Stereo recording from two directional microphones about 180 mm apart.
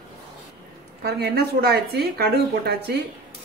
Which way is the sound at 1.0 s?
60° right (ahead or behind).